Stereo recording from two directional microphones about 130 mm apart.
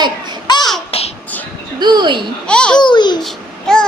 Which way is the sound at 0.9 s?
50° left (ahead or behind).